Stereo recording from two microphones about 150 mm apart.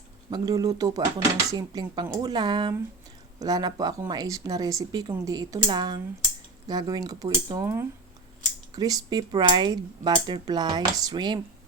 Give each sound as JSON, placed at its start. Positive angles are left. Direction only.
{"t": 0.3, "sound": "speech", "side_deg": -25}